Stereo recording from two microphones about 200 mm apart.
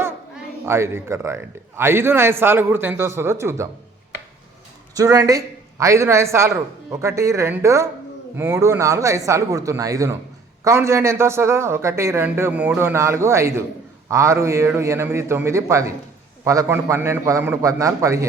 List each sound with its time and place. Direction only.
0.6 s a man's voice: 10° right (ahead or behind)
4.9 s a man's voice: 15° right (ahead or behind)